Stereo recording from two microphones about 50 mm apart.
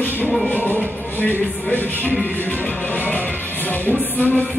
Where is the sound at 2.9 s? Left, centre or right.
Left.